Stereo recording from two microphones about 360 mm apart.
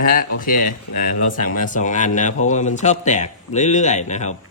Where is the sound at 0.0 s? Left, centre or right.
Left.